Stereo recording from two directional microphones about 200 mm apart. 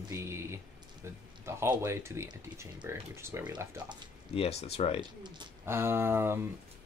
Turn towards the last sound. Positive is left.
turn(degrees=-10)  # may be behind; listen again after turning